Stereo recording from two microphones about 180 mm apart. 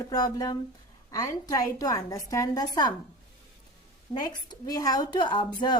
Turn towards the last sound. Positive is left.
turn(degrees=25)  # may be behind; listen again after turning